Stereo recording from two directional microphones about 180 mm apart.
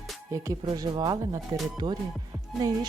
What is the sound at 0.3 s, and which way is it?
Speech, 20° right (ahead or behind).